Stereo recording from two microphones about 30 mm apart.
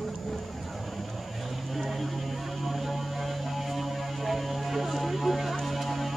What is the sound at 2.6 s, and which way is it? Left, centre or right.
Music, centre.